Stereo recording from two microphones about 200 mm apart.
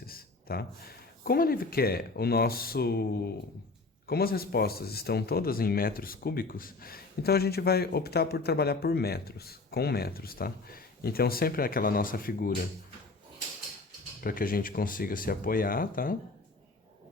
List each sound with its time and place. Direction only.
0.1 s speech: 50° left (ahead or behind)
14.3 s speech: 45° left (ahead or behind)